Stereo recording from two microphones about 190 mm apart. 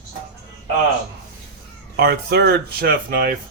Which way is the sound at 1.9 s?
60° right (ahead or behind).